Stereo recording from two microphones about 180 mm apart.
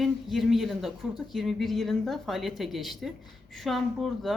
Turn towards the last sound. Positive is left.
turn(degrees=0)  # may be behind; listen again after turning